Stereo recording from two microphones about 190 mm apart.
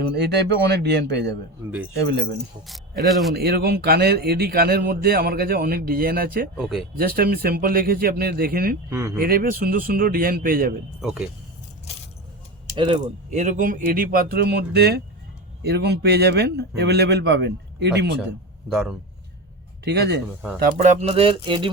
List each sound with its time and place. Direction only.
0.2 s a man's voice: 60° right (ahead or behind)
3.1 s speech: centre (ahead or behind)
3.3 s speech: 55° right (ahead or behind)
6.6 s speech: centre (ahead or behind)
6.9 s speech: 50° right (ahead or behind)
8.9 s speech: 15° right (ahead or behind)
9.1 s speech: 50° right (ahead or behind)
11.0 s speech: 5° right (ahead or behind)
12.7 s a man's voice: 30° right (ahead or behind); by 18.2 s 60° right (ahead or behind)
18.7 s speech: 5° right (ahead or behind)
19.8 s a man's voice: 60° right (ahead or behind)
21.0 s speech: 30° right (ahead or behind)